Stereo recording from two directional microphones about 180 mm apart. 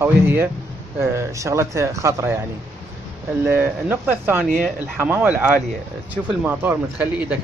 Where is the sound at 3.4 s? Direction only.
10° right (ahead or behind).